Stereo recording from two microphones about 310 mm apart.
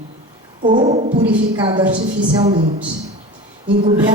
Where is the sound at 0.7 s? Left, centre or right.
Centre.